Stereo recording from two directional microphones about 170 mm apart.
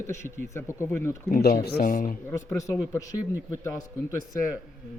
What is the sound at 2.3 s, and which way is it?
A man's voice, 15° left (ahead or behind).